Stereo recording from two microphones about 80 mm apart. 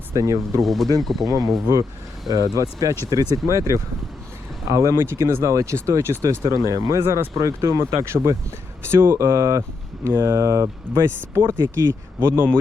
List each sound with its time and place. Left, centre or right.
0.1 s speech: right
0.6 s speech: centre
2.3 s speech: right
7.0 s speech: right
7.3 s speech: right